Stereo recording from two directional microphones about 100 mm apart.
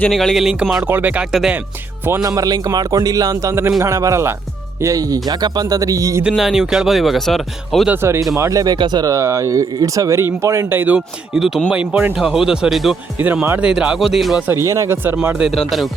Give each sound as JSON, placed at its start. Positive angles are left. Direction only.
{"t": 0.1, "sound": "speech", "side_deg": 0}
{"t": 0.9, "sound": "speech", "side_deg": -20}
{"t": 1.3, "sound": "speech", "side_deg": 0}
{"t": 2.2, "sound": "speech", "side_deg": -35}
{"t": 6.2, "sound": "speech", "side_deg": -5}
{"t": 8.4, "sound": "speech", "side_deg": -35}
{"t": 11.3, "sound": "speech", "side_deg": -5}
{"t": 13.2, "sound": "speech", "side_deg": -15}
{"t": 14.5, "sound": "speech", "side_deg": -30}
{"t": 15.5, "sound": "speech", "side_deg": 0}